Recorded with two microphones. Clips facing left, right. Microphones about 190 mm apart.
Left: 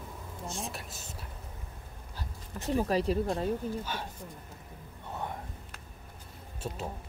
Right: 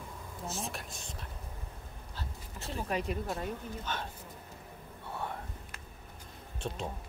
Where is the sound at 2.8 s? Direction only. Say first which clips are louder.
Left 6 dB; 35° left (ahead or behind).